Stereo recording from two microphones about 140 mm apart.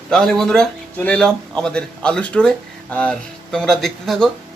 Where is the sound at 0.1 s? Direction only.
5° left (ahead or behind).